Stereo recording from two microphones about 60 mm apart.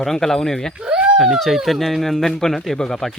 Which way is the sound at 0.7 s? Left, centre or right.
Centre.